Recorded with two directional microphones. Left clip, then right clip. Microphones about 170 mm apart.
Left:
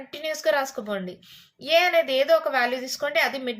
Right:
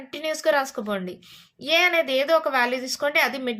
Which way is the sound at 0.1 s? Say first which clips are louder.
Right 2 dB; 30° right (ahead or behind).